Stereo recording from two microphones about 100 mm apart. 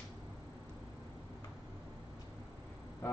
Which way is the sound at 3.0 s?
25° left (ahead or behind).